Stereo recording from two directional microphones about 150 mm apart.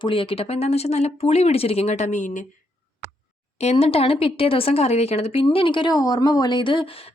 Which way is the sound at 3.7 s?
40° left (ahead or behind).